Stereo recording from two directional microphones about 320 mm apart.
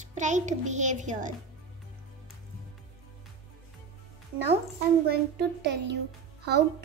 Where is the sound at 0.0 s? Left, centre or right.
Right.